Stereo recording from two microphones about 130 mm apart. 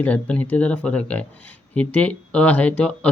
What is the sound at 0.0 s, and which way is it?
Speech, 10° left (ahead or behind).